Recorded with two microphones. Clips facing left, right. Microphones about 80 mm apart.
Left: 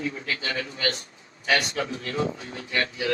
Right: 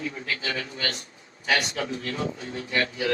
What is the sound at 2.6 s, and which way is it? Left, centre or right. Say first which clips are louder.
Speech: right 1 dB; right.